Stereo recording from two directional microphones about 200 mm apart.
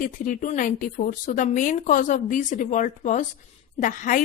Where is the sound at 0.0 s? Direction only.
40° left (ahead or behind).